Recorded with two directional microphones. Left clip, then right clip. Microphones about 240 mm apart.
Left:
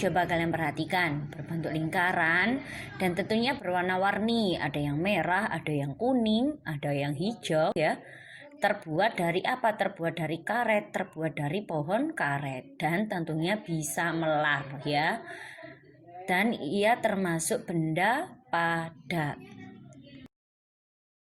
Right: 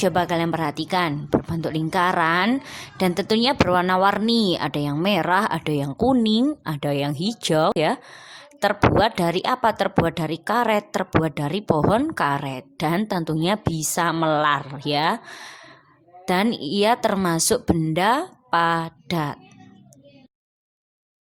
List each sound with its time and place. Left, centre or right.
0.0 s a woman's voice: right